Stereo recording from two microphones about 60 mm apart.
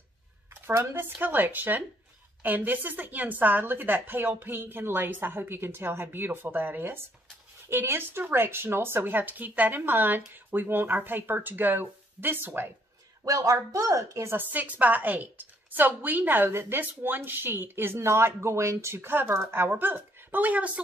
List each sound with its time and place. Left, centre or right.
0.5 s a woman's voice: right
13.2 s speech: right
14.3 s a woman's voice: right